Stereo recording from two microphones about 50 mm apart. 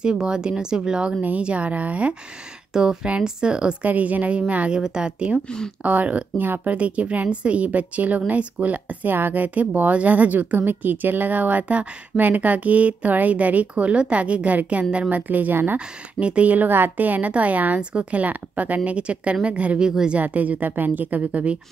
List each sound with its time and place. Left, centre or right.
0.0 s speech: centre
1.2 s a woman's voice: right
2.7 s speech: centre
3.8 s a woman's voice: right
5.8 s a woman's voice: right
16.2 s a woman's voice: right
19.8 s speech: centre
20.2 s speech: right